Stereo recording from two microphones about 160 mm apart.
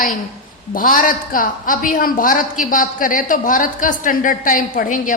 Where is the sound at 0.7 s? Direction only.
60° left (ahead or behind).